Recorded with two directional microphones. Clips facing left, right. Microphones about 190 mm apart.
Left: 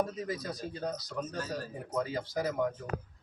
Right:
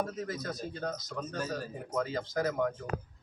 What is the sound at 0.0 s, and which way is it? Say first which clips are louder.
Speech: left 1 dB; 15° left (ahead or behind).